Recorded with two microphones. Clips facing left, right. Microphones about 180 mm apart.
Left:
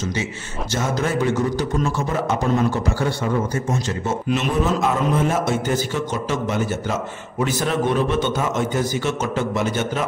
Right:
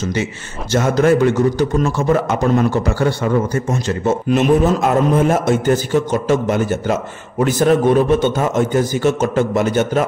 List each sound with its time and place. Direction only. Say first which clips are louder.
0.7 s a man's voice: right 9 dB; 60° right (ahead or behind)